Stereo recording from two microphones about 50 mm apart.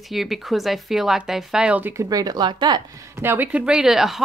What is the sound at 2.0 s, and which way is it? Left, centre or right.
Speech, right.